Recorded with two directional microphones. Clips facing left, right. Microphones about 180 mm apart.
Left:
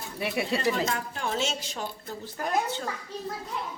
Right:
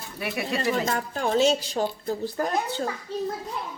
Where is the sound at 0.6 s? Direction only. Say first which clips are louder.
Right 5 dB; 40° right (ahead or behind).